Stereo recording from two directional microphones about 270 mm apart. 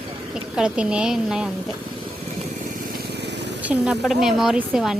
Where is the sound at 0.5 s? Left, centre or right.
Centre.